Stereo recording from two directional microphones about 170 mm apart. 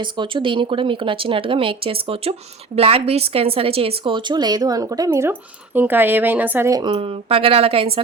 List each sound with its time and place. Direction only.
0.0 s a woman's voice: 25° right (ahead or behind)
6.9 s speech: 35° right (ahead or behind)